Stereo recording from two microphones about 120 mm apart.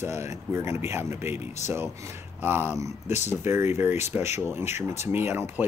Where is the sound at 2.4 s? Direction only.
15° right (ahead or behind).